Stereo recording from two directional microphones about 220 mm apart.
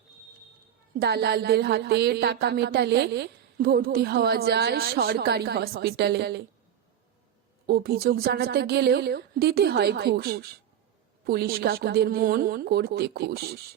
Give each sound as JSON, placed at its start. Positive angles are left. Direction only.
{"t": 0.9, "sound": "a woman's voice", "side_deg": -45}
{"t": 7.7, "sound": "a woman's voice", "side_deg": -45}